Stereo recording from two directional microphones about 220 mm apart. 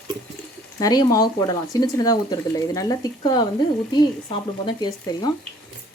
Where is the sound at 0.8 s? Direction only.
15° left (ahead or behind).